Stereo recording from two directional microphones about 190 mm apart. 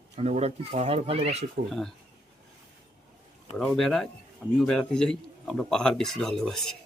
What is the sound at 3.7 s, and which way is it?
Speech, centre (ahead or behind).